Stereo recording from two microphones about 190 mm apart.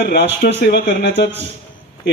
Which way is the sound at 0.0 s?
60° left (ahead or behind).